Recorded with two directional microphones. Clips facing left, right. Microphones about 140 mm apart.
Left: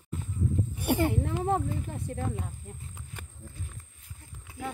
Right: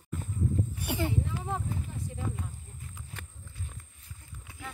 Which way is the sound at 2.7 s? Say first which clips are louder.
Left 7 dB; 70° left (ahead or behind).